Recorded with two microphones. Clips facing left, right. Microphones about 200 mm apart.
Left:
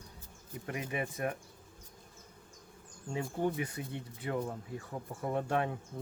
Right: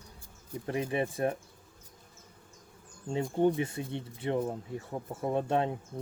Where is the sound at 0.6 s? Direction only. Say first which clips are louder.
Right 6 dB; 30° right (ahead or behind).